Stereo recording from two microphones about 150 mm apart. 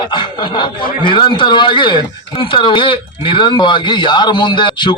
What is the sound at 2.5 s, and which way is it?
Speech, 35° left (ahead or behind).